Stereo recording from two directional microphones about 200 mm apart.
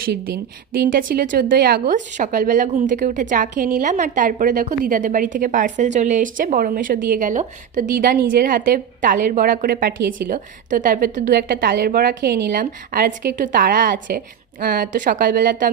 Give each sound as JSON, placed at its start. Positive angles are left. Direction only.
{"t": 0.0, "sound": "a woman's voice", "side_deg": -50}
{"t": 1.8, "sound": "a woman's voice", "side_deg": -40}